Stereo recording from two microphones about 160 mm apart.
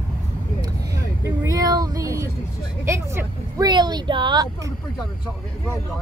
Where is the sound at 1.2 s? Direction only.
20° right (ahead or behind).